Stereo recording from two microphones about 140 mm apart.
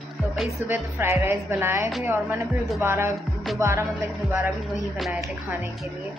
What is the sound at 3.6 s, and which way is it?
Speech, 20° right (ahead or behind).